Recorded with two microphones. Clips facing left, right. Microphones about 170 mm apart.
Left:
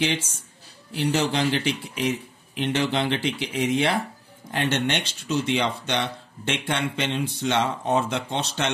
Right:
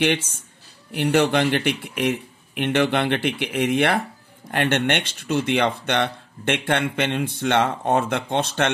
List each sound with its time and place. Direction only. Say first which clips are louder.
0.0 s speech: right 4 dB; 60° right (ahead or behind)